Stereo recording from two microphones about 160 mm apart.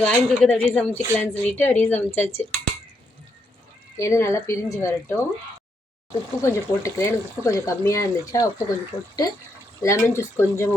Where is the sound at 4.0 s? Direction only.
15° left (ahead or behind).